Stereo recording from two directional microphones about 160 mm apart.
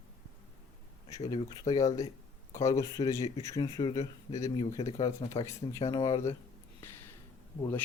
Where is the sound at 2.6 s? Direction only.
25° left (ahead or behind).